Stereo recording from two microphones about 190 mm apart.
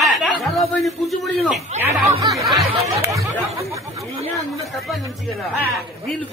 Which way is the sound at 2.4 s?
Centre (ahead or behind).